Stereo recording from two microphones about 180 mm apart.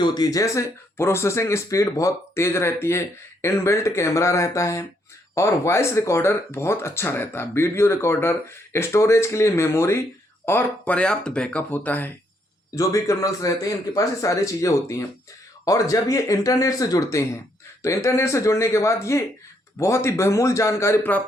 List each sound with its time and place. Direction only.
0.0 s speech: 20° left (ahead or behind)